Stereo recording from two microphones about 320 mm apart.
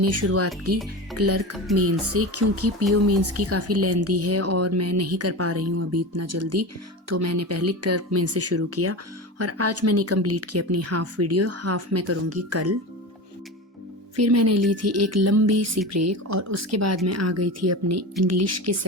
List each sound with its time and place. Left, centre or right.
0.0 s speech: right
14.2 s speech: right